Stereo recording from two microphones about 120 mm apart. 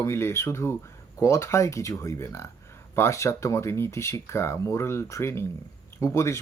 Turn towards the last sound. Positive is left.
turn(degrees=25)  # may be behind; listen again after turning